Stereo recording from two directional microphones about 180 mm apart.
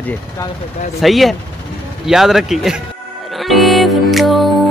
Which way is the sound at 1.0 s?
Centre (ahead or behind).